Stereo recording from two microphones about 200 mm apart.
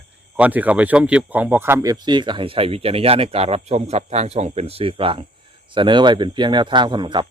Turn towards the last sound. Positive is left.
turn(degrees=-25)  # may be behind; listen again after turning